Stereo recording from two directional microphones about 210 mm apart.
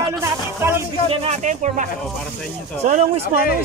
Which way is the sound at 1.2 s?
35° right (ahead or behind).